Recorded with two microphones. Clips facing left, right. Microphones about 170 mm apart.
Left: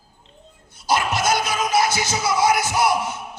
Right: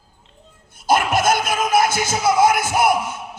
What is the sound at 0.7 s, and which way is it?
Music, 50° right (ahead or behind).